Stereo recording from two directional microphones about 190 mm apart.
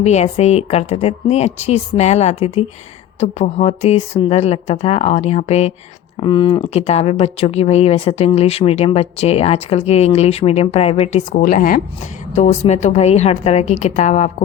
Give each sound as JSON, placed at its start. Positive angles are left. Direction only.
{"t": 0.0, "sound": "speech", "side_deg": 35}
{"t": 6.1, "sound": "speech", "side_deg": 25}